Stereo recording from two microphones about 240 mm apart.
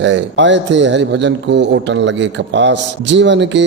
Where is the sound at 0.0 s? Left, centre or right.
Right.